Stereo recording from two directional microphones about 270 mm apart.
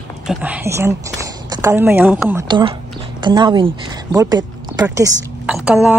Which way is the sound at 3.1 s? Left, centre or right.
Centre.